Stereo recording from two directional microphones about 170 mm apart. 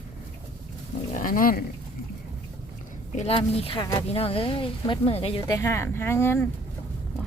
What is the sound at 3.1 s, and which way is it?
Speech, 35° left (ahead or behind).